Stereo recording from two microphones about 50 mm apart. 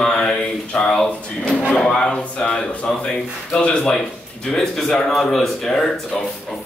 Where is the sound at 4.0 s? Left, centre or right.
Centre.